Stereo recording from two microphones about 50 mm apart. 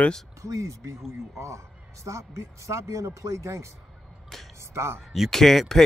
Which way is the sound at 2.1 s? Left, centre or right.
Right.